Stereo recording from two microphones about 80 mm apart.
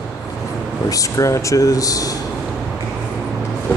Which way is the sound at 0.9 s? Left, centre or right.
Left.